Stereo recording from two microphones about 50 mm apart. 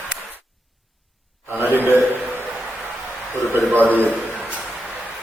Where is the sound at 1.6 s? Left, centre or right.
Right.